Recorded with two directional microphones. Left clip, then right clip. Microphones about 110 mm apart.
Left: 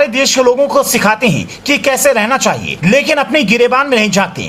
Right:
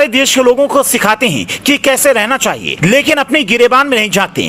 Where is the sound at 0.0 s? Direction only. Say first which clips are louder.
Right 1 dB; 45° right (ahead or behind).